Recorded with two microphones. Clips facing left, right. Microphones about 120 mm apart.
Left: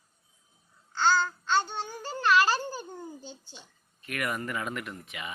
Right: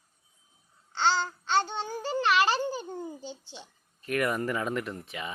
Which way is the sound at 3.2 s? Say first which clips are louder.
Right 4 dB; 75° right (ahead or behind).